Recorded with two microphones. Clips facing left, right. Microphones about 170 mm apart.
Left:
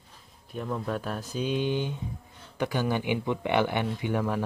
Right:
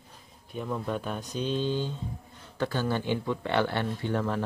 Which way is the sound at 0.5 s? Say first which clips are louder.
Even; centre (ahead or behind).